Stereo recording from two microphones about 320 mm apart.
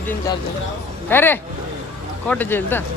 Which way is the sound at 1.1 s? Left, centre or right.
Centre.